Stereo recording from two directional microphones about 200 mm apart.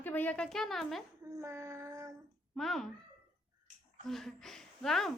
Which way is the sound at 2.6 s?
Centre (ahead or behind).